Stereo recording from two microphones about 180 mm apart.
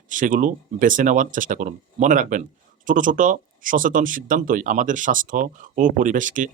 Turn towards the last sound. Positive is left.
turn(degrees=-45)  # may be behind; listen again after turning